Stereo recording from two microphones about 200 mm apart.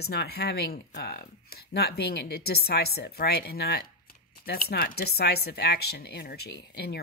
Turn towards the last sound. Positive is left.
turn(degrees=50)  # may be behind; listen again after turning